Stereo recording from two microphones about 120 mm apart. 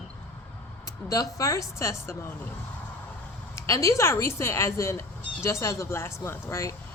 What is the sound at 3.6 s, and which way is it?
A woman's voice, 25° left (ahead or behind).